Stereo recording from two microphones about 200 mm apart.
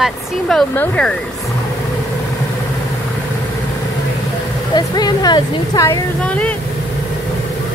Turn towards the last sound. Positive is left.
turn(degrees=5)  # may be behind; listen again after turning